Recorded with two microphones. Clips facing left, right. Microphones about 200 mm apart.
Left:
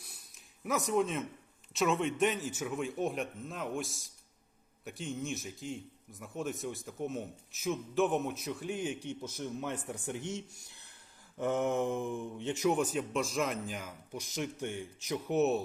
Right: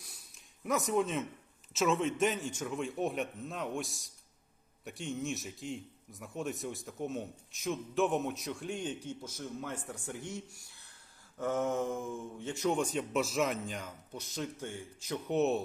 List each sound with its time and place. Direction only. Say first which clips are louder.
0.0 s a sound: even; centre (ahead or behind)
1.7 s a man's voice: even; centre (ahead or behind)
9.3 s speech: left 4 dB; 20° left (ahead or behind)
12.7 s a man's voice: even; 5° left (ahead or behind)
15.3 s a man's voice: left 1 dB; centre (ahead or behind)